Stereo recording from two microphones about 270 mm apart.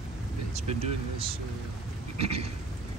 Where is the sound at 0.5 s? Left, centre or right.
Right.